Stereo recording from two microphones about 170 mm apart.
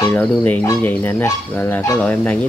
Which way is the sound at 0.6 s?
15° left (ahead or behind).